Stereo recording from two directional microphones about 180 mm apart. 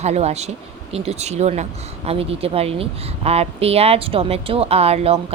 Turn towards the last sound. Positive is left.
turn(degrees=-35)  # may be behind; listen again after turning